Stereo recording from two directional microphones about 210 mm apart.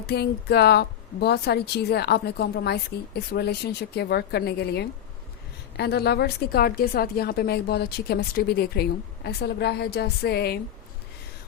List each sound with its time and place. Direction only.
0.1 s a woman's voice: 50° left (ahead or behind)